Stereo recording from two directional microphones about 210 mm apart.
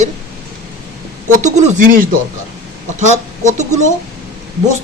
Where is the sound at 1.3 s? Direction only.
35° right (ahead or behind).